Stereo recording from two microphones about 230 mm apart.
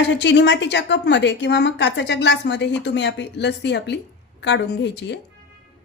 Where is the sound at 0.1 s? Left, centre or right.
Left.